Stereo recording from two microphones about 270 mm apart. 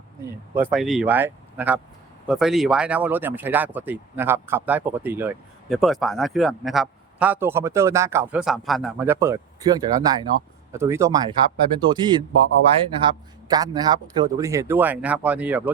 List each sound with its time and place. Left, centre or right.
0.5 s speech: centre